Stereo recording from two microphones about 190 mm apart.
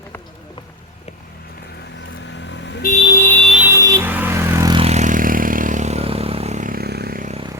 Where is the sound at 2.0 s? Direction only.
75° left (ahead or behind).